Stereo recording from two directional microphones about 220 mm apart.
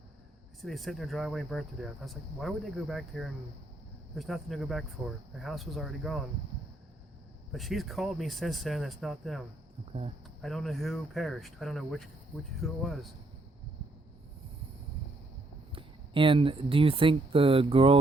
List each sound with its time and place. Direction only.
0.6 s speech: centre (ahead or behind)
7.5 s speech: centre (ahead or behind)
10.4 s speech: centre (ahead or behind)
15.7 s speech: 25° right (ahead or behind)